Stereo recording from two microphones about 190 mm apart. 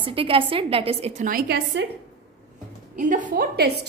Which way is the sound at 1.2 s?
55° right (ahead or behind).